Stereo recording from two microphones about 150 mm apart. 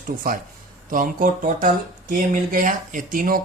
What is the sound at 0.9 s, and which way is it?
Speech, 65° right (ahead or behind).